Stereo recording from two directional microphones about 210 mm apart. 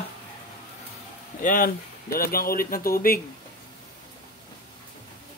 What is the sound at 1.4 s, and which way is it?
Speech, 40° left (ahead or behind).